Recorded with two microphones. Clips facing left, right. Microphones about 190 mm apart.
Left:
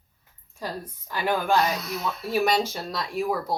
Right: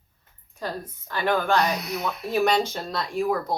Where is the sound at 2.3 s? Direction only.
Centre (ahead or behind).